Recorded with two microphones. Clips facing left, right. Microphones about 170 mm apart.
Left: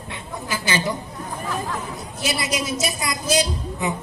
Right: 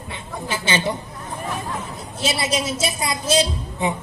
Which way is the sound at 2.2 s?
30° right (ahead or behind).